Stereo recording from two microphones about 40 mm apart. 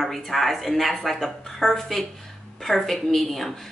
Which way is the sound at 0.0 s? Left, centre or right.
Centre.